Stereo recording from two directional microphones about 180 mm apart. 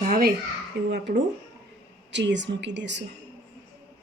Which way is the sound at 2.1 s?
80° right.